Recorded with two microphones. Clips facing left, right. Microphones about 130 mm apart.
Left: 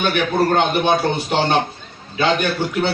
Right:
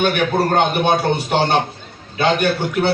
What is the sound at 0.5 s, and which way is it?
Speech, 50° right (ahead or behind).